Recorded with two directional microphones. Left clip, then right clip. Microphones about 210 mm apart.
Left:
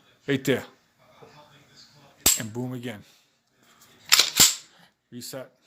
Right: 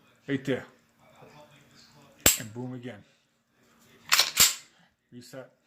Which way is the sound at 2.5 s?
55° left (ahead or behind).